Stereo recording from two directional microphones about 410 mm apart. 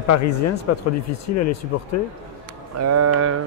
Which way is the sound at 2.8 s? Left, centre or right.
Right.